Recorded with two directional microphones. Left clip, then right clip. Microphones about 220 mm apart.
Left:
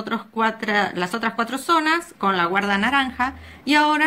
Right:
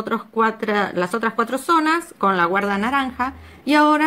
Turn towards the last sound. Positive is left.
turn(degrees=-10)  # may be behind; listen again after turning